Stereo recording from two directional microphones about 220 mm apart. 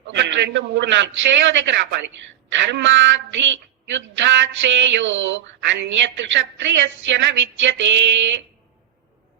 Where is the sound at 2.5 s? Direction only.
55° right (ahead or behind).